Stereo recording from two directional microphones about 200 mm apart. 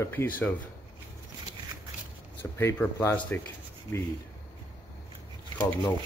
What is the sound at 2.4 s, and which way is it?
Speech, 10° left (ahead or behind).